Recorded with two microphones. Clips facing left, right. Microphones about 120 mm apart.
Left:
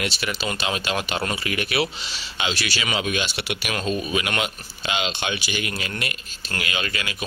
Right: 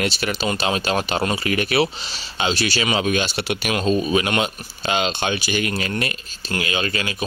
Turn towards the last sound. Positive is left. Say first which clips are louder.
# right 5 dB
turn(degrees=-30)  # may be behind; listen again after turning